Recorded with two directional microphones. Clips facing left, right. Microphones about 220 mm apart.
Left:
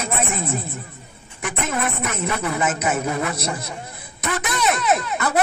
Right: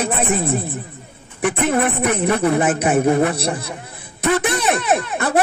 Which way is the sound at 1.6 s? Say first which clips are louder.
Right 6 dB; 30° right (ahead or behind).